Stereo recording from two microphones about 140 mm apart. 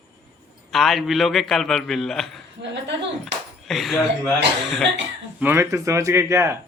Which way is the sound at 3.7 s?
Centre (ahead or behind).